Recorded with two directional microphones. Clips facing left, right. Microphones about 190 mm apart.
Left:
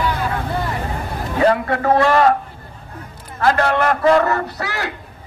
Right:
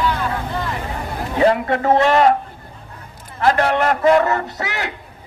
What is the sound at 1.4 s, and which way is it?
Speech, 20° right (ahead or behind).